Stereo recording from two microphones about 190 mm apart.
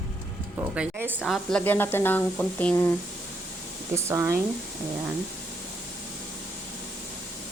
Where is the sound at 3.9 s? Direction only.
15° right (ahead or behind).